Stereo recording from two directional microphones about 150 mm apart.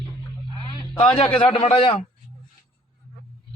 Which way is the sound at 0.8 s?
35° left (ahead or behind).